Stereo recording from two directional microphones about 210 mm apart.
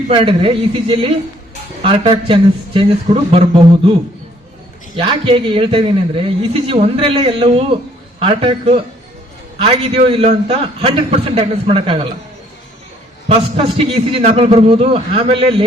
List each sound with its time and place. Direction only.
0.1 s a man's voice: 25° right (ahead or behind)
4.9 s a man's voice: 25° right (ahead or behind)
13.7 s a man's voice: 25° right (ahead or behind)